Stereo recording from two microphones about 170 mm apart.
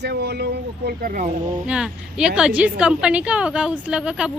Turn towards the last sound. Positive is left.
turn(degrees=-5)  # may be behind; listen again after turning